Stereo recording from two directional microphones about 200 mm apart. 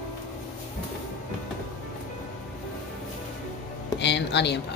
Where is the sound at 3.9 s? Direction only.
60° left (ahead or behind).